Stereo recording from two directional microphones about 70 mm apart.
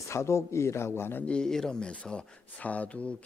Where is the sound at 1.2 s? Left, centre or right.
Centre.